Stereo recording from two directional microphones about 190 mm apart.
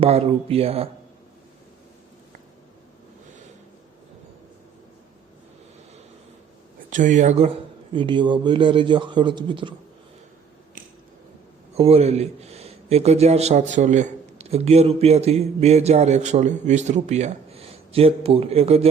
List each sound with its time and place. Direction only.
0.0 s speech: 30° right (ahead or behind)
6.9 s speech: 40° right (ahead or behind); by 9.7 s 25° right (ahead or behind)
11.7 s speech: 30° right (ahead or behind)